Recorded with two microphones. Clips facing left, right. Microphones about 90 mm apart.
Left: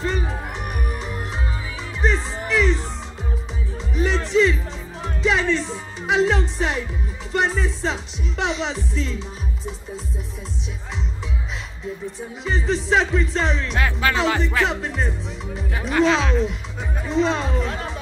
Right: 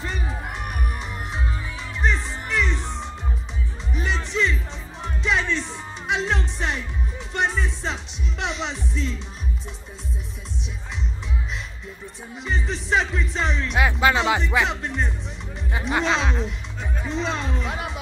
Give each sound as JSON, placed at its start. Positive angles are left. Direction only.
{"t": 0.0, "sound": "music", "side_deg": 0}
{"t": 3.9, "sound": "music", "side_deg": 0}
{"t": 12.4, "sound": "music", "side_deg": 0}
{"t": 13.7, "sound": "music", "side_deg": -15}
{"t": 14.6, "sound": "music", "side_deg": 0}
{"t": 16.0, "sound": "a sound", "side_deg": 0}
{"t": 17.0, "sound": "music", "side_deg": 0}